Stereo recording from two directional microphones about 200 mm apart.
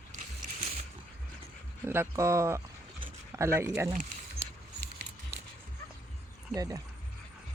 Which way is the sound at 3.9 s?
35° right (ahead or behind).